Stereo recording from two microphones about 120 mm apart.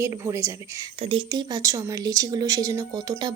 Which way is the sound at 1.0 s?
50° right (ahead or behind).